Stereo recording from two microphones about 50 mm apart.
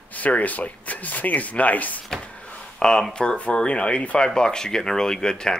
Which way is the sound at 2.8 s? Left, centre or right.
Centre.